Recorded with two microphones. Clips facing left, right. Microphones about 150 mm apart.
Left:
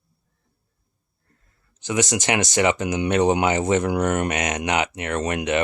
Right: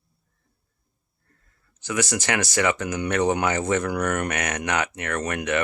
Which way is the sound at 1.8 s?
20° left (ahead or behind).